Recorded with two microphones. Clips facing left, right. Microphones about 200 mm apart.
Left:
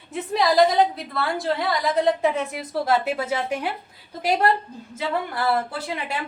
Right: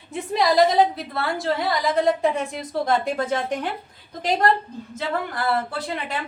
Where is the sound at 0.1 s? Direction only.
Centre (ahead or behind).